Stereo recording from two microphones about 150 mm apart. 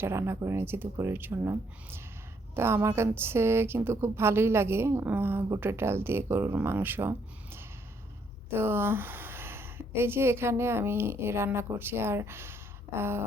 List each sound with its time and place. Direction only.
0.0 s a woman's voice: 15° right (ahead or behind)